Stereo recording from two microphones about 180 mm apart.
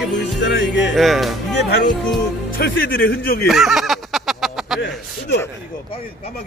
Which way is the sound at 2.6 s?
60° left (ahead or behind).